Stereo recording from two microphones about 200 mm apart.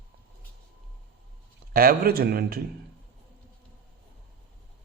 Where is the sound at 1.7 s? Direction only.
50° right (ahead or behind).